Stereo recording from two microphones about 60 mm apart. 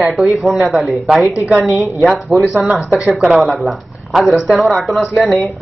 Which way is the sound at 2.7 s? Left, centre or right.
Centre.